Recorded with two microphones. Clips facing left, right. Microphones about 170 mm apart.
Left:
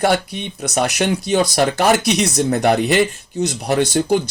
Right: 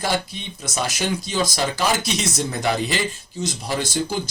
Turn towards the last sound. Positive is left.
turn(degrees=65)  # may be behind; listen again after turning